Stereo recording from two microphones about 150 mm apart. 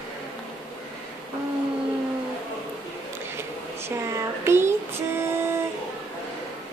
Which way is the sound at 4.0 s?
20° right (ahead or behind).